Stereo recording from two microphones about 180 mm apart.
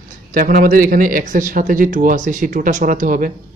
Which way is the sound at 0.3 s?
60° right (ahead or behind).